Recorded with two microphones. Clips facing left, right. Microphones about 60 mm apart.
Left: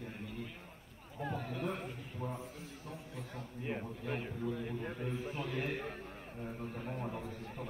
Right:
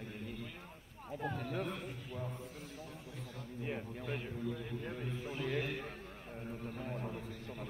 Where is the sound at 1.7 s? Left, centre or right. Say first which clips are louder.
Left 2 dB; left.